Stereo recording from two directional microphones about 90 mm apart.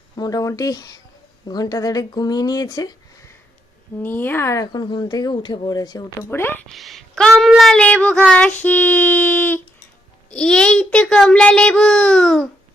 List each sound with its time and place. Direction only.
0.2 s speech: 40° left (ahead or behind)
4.0 s child singing: 25° left (ahead or behind)
4.6 s speech: 50° left (ahead or behind)
6.3 s child singing: 25° left (ahead or behind)
6.7 s a woman's voice: centre (ahead or behind)
7.8 s child singing: 15° left (ahead or behind)
10.2 s a child's voice: 10° left (ahead or behind)